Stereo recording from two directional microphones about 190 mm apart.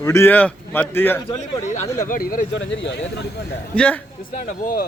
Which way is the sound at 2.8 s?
70° left (ahead or behind).